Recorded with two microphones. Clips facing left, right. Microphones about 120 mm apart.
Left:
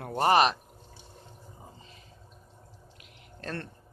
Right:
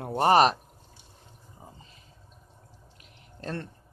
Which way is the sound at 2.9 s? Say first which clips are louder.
Left 1 dB; 30° right (ahead or behind).